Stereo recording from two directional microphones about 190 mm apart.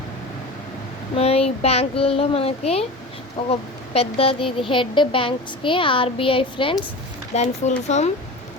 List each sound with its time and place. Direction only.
1.1 s a child's voice: 30° left (ahead or behind)